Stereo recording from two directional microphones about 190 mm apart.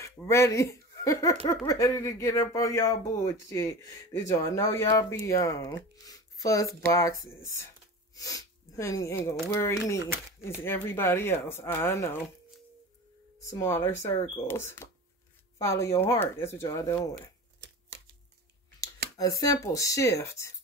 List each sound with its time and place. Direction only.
0.0 s speech: 15° left (ahead or behind)
13.5 s speech: 15° left (ahead or behind)
19.1 s speech: 20° left (ahead or behind)